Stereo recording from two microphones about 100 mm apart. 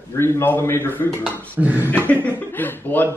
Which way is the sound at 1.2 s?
15° right (ahead or behind).